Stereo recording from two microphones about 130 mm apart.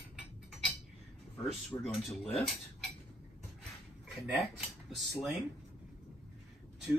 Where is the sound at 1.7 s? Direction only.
25° left (ahead or behind).